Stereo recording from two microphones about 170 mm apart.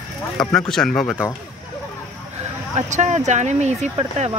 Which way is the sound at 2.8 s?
45° right (ahead or behind).